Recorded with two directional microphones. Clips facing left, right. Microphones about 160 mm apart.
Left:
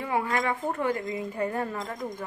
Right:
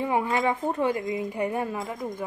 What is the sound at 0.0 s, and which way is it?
Speech, 20° right (ahead or behind).